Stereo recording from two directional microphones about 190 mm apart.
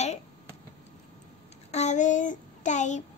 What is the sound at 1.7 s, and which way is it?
Child singing, 40° left (ahead or behind).